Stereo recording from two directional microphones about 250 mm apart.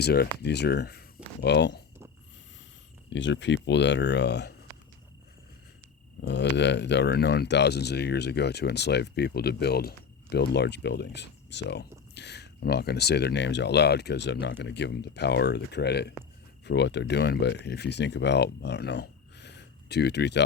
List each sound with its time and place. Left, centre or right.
0.0 s speech: left
3.1 s speech: left
6.2 s speech: left